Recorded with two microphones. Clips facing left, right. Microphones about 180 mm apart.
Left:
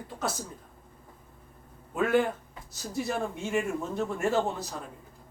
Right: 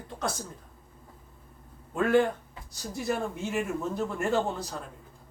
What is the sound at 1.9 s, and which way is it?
Speech, 5° left (ahead or behind).